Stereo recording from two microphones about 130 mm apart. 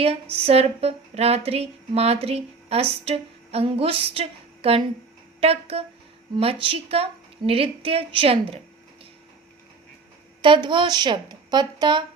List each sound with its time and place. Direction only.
0.0 s speech: 50° right (ahead or behind)
10.4 s speech: 40° right (ahead or behind)